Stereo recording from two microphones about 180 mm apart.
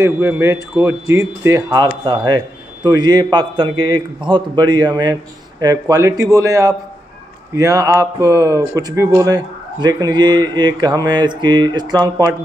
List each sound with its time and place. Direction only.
0.0 s a man's voice: 15° right (ahead or behind)